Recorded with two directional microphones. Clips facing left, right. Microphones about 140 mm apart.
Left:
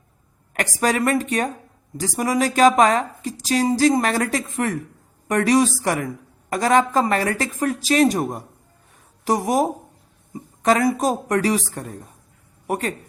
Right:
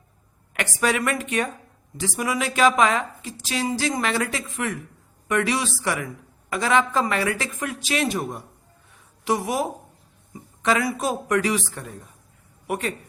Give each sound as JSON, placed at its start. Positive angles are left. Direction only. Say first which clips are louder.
{"t": 0.5, "sound": "speech", "louder": "left 2 dB", "side_deg": 40}